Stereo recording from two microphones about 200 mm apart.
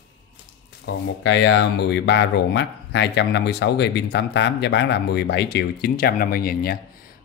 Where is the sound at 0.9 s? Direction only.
75° left (ahead or behind).